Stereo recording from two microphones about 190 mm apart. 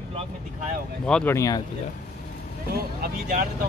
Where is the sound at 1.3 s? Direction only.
20° left (ahead or behind).